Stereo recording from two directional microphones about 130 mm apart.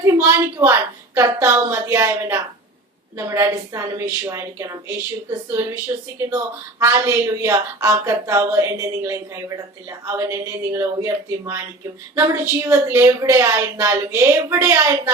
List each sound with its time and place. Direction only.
0.0 s speech: 20° right (ahead or behind)
6.1 s speech: 20° right (ahead or behind)